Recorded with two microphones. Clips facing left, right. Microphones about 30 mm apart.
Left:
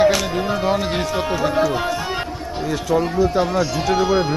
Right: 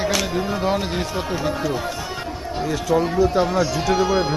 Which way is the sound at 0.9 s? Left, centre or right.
Left.